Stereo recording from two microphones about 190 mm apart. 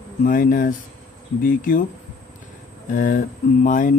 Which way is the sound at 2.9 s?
45° left (ahead or behind).